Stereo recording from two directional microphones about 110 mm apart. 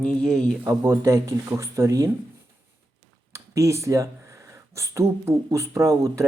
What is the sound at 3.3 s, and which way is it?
Speech, 30° right (ahead or behind).